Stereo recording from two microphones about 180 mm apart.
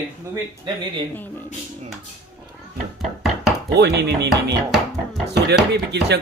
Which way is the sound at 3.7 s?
65° right (ahead or behind).